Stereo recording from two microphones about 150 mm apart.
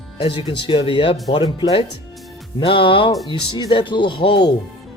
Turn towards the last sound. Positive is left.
turn(degrees=35)  # may be behind; listen again after turning